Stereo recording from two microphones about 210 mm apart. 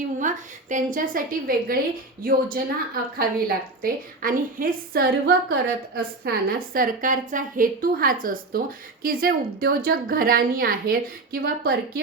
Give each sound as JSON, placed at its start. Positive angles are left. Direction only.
{"t": 0.2, "sound": "a woman's voice", "side_deg": -35}